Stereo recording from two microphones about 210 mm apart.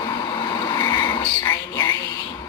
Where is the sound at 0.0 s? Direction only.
20° left (ahead or behind).